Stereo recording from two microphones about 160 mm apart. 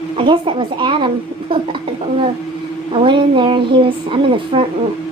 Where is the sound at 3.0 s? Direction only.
30° right (ahead or behind).